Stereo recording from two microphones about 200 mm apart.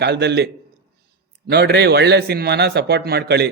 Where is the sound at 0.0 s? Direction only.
55° right (ahead or behind).